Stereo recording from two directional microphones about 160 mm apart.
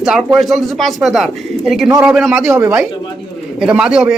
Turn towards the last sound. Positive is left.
turn(degrees=-5)  # may be behind; listen again after turning